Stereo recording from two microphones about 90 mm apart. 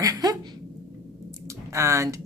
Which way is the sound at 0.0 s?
45° right (ahead or behind).